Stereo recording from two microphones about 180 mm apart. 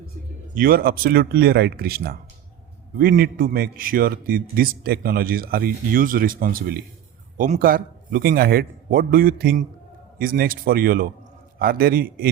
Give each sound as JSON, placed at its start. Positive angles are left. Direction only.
{"t": 0.5, "sound": "a man's voice", "side_deg": -55}